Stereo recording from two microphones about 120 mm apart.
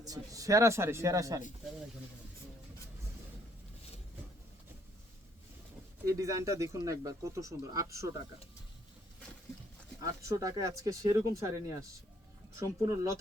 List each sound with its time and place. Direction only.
0.0 s speech: 30° right (ahead or behind)
6.1 s speech: 25° right (ahead or behind)
10.2 s speech: 25° right (ahead or behind)